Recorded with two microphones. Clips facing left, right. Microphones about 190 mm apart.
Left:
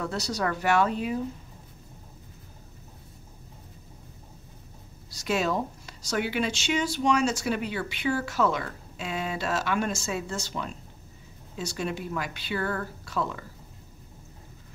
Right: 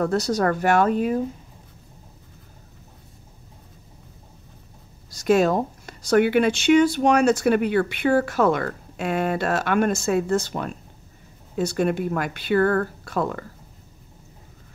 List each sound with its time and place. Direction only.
0.0 s speech: 50° right (ahead or behind)
5.1 s speech: 50° right (ahead or behind)